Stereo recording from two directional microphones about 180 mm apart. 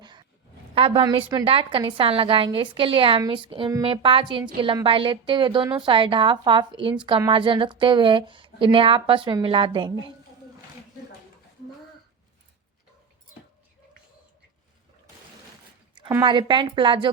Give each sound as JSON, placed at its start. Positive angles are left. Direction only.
{"t": 0.0, "sound": "a sound", "side_deg": -25}
{"t": 0.7, "sound": "a woman's voice", "side_deg": -30}
{"t": 16.0, "sound": "speech", "side_deg": -20}